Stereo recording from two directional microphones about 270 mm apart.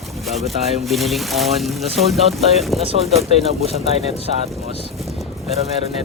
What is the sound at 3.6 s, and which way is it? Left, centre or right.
Speech, right.